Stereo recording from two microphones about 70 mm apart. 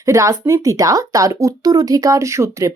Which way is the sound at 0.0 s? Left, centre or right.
Right.